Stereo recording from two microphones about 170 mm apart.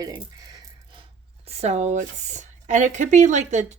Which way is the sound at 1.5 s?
40° right (ahead or behind).